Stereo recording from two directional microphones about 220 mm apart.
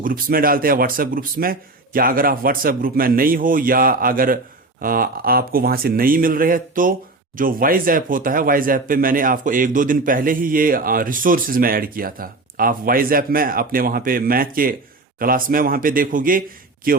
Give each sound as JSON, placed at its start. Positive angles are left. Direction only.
{"t": 0.0, "sound": "speech", "side_deg": -40}